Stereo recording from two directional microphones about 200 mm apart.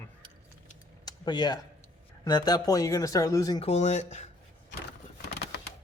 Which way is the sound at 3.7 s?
35° left (ahead or behind).